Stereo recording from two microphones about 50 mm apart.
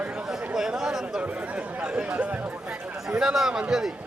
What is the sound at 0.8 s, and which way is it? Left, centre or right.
Speech, centre.